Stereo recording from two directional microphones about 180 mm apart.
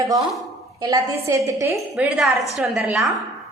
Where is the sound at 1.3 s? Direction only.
15° right (ahead or behind).